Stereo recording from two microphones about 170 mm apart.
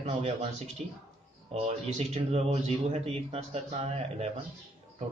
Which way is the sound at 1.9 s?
40° right (ahead or behind).